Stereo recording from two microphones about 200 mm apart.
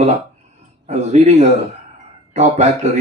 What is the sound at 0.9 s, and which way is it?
A man's voice, 35° right (ahead or behind).